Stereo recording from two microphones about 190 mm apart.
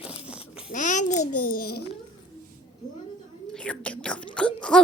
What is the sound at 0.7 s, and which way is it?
A child's voice, 40° left (ahead or behind).